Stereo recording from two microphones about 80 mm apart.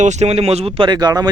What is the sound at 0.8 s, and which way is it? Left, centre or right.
Speech, right.